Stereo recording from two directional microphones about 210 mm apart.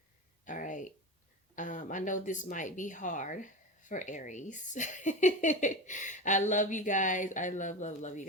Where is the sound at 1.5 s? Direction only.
35° left (ahead or behind).